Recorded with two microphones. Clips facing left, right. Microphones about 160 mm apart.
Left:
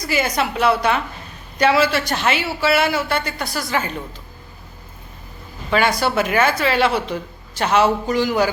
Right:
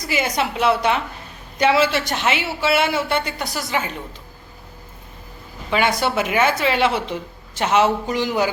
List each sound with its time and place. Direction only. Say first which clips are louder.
0.1 s speech: left 1 dB; 20° right (ahead or behind)
5.7 s speech: left 1 dB; 20° right (ahead or behind)